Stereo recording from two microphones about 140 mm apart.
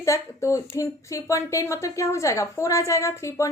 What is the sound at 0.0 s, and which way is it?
A woman's voice, 20° left (ahead or behind).